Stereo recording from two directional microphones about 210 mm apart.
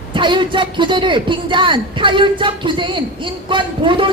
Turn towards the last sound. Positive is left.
turn(degrees=-25)  # may be behind; listen again after turning